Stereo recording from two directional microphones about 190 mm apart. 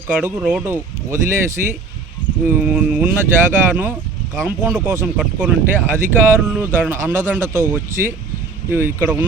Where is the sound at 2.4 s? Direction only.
5° right (ahead or behind).